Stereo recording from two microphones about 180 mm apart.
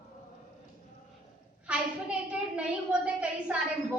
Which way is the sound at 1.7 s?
5° right (ahead or behind).